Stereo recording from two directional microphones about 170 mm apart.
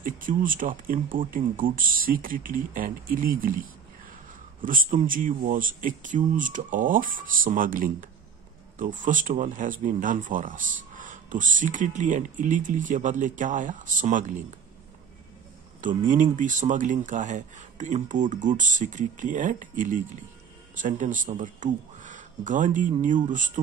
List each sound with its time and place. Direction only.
0.0 s speech: 50° right (ahead or behind)
4.6 s speech: 55° right (ahead or behind)
16.1 s speech: 50° right (ahead or behind)